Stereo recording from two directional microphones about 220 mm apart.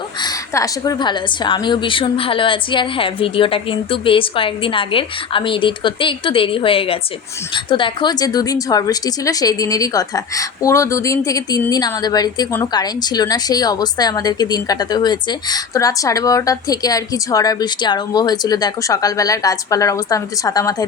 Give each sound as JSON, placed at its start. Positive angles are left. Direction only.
{"t": 0.2, "sound": "a woman's voice", "side_deg": 15}